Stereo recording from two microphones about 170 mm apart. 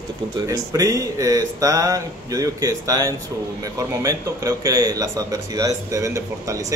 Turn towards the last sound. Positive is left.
turn(degrees=-20)  # may be behind; listen again after turning